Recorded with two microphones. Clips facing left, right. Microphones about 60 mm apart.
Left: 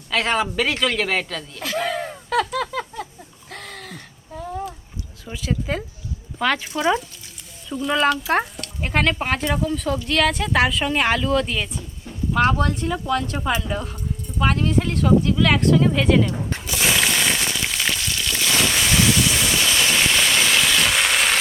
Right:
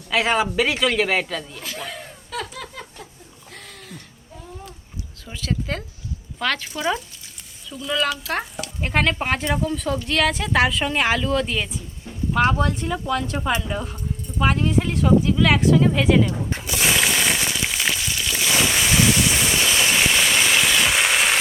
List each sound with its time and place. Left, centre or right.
0.1 s speech: centre
1.6 s a sound: left
5.2 s speech: centre
7.9 s speech: left
8.6 s speech: centre
12.3 s a sound: centre